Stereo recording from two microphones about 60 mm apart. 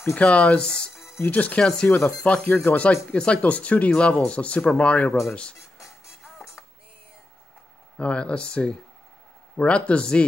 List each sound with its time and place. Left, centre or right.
0.1 s speech: left
1.6 s speech: centre
2.4 s speech: left
6.2 s music: centre
8.0 s speech: centre